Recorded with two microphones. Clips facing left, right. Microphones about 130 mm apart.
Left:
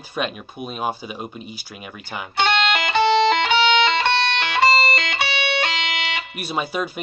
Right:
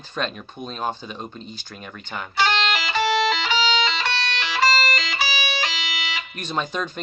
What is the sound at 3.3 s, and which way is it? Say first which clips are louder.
Music: left 5 dB; 60° left (ahead or behind).